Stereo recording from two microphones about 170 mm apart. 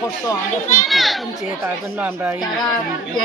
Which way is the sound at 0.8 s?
Centre (ahead or behind).